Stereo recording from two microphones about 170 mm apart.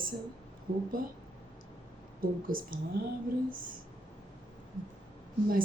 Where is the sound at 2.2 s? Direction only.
55° right (ahead or behind).